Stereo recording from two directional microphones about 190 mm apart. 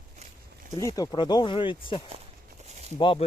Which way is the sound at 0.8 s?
20° left (ahead or behind).